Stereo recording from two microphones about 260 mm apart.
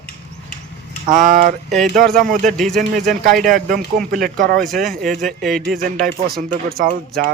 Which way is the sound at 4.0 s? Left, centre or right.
Centre.